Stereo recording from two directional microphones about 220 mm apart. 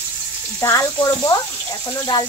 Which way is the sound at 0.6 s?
15° left (ahead or behind).